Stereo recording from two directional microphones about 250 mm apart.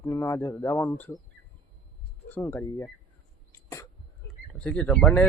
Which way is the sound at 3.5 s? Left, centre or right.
Centre.